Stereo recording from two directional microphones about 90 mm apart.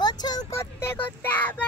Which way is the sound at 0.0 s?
50° left (ahead or behind).